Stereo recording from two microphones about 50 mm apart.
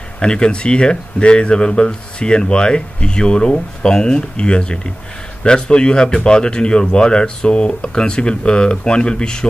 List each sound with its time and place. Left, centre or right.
0.2 s speech: centre